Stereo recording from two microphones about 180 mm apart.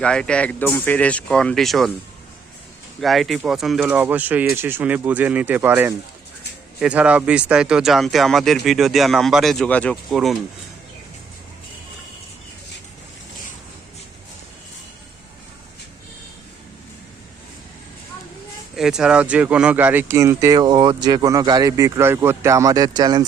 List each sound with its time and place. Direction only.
0.0 s speech: 5° left (ahead or behind)
3.0 s speech: centre (ahead or behind)
18.8 s speech: 5° right (ahead or behind); by 23.2 s 20° right (ahead or behind)